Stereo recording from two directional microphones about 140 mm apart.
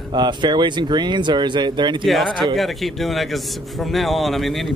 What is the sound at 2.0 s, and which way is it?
A man's voice, centre (ahead or behind).